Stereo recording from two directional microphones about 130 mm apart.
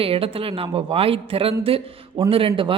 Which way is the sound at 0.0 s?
45° right (ahead or behind).